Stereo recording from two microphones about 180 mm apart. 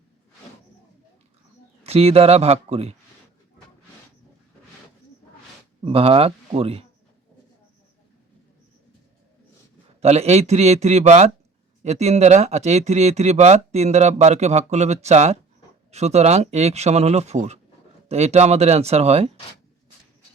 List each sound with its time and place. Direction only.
1.8 s speech: 35° right (ahead or behind)
5.8 s speech: 30° right (ahead or behind)
10.0 s speech: 35° right (ahead or behind)